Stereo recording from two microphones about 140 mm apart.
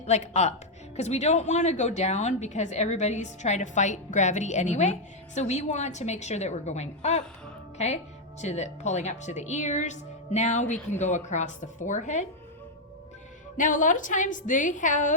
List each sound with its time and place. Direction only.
0.0 s a woman's voice: 50° left (ahead or behind)
13.6 s a woman's voice: 65° left (ahead or behind)